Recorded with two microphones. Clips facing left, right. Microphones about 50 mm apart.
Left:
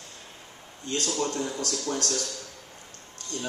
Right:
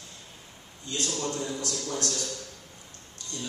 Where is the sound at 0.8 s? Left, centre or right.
Left.